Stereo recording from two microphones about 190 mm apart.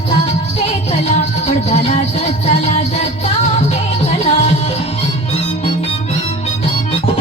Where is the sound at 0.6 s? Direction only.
35° left (ahead or behind).